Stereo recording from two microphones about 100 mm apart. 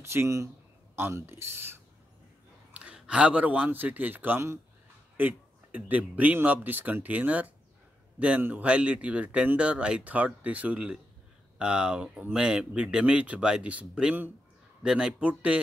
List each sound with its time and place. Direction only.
0.0 s speech: 25° right (ahead or behind)
2.7 s a man's voice: 10° right (ahead or behind)